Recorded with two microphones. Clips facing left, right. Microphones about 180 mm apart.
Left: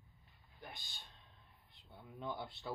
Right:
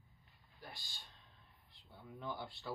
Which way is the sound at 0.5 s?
20° left (ahead or behind).